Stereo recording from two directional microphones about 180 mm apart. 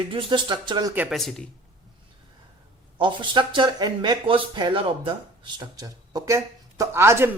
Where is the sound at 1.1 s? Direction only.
Centre (ahead or behind).